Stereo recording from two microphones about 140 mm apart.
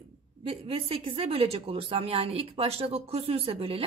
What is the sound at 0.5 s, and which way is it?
A woman's voice, 40° right (ahead or behind).